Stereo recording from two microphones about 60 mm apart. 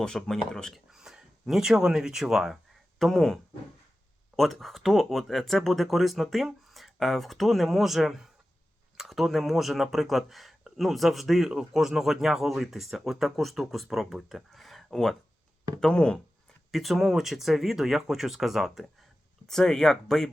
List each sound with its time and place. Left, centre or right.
0.0 s speech: centre
0.9 s speech: centre
3.0 s speech: centre
16.7 s speech: centre
19.5 s speech: centre